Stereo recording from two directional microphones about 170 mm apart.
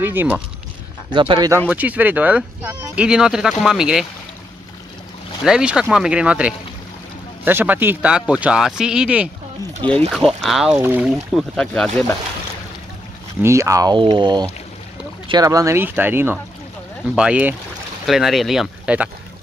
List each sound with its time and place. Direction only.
0.0 s speech: 10° right (ahead or behind)
1.1 s speech: 30° right (ahead or behind)
1.7 s speech: 10° right (ahead or behind)
5.4 s speech: 5° right (ahead or behind)
9.8 s speech: 30° right (ahead or behind)
10.1 s speech: centre (ahead or behind)
11.1 s speech: centre (ahead or behind)
13.4 s speech: 15° right (ahead or behind)